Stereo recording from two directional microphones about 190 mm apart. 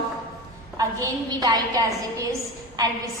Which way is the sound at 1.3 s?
20° right (ahead or behind).